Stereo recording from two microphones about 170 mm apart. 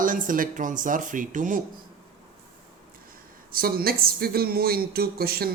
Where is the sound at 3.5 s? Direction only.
60° right (ahead or behind).